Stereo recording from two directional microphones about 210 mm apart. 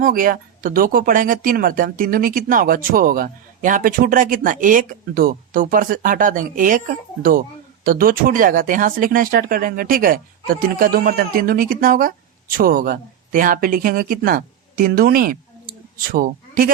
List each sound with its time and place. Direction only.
0.0 s speech: 40° right (ahead or behind)